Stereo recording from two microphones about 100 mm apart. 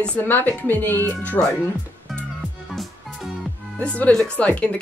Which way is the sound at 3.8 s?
10° left (ahead or behind).